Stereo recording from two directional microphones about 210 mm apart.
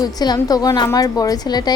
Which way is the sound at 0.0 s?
20° left (ahead or behind).